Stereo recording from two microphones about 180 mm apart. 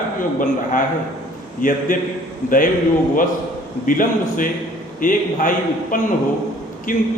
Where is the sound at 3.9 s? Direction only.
50° left (ahead or behind).